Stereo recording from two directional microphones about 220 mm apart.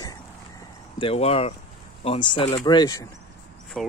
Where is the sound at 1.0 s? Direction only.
25° left (ahead or behind).